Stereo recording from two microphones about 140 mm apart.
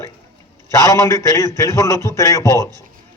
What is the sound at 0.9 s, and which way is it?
A man's voice, 20° left (ahead or behind).